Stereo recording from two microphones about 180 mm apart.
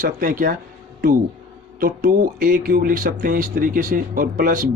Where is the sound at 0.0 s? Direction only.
50° right (ahead or behind).